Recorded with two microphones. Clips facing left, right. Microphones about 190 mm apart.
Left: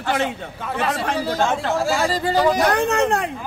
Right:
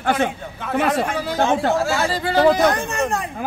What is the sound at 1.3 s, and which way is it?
Speech, 15° right (ahead or behind).